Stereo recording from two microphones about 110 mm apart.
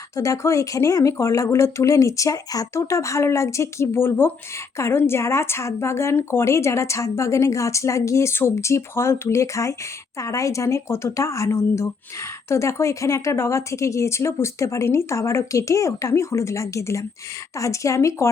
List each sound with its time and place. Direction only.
0.2 s speech: 30° left (ahead or behind)